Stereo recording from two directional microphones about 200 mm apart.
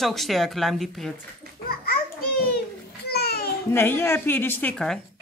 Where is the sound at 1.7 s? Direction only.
50° left (ahead or behind).